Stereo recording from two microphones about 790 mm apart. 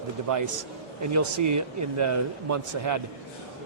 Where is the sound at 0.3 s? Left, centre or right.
Right.